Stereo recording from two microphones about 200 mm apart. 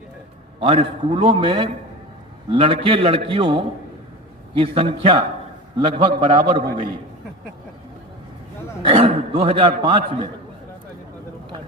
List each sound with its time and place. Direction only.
0.6 s a man's voice: 25° right (ahead or behind)
8.8 s a man's voice: 25° right (ahead or behind)